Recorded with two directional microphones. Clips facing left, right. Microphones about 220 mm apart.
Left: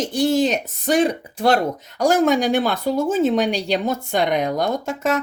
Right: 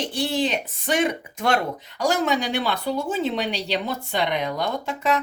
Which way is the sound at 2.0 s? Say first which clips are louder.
Left 6 dB; 45° left (ahead or behind).